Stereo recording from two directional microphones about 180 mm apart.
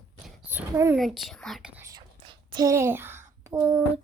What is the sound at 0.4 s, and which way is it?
Speech, 10° right (ahead or behind).